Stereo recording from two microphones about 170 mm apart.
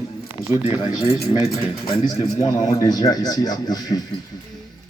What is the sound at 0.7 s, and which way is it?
Speech, 15° right (ahead or behind).